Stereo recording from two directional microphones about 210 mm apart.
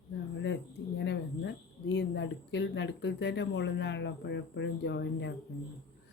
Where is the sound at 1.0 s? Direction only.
55° left (ahead or behind).